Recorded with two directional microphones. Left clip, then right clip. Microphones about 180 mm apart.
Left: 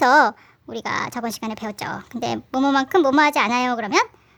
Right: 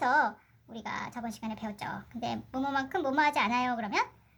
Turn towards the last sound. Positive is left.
turn(degrees=40)  # may be behind; listen again after turning